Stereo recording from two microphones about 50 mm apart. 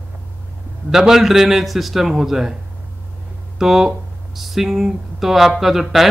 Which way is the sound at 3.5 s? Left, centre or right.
Centre.